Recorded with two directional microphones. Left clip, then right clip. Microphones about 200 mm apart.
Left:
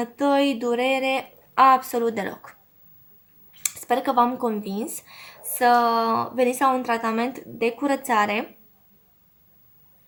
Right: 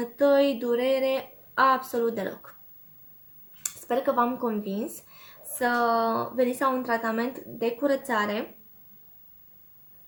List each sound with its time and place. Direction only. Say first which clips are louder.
0.0 s speech: even; 35° left (ahead or behind)
3.6 s speech: left 4 dB; 40° left (ahead or behind)